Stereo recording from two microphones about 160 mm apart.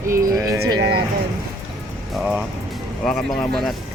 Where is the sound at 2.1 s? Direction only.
5° right (ahead or behind).